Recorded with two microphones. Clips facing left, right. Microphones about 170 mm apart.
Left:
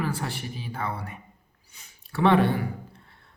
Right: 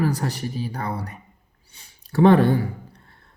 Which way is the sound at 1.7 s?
30° right (ahead or behind).